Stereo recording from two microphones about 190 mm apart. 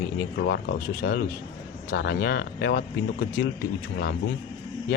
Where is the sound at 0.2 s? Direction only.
60° left (ahead or behind).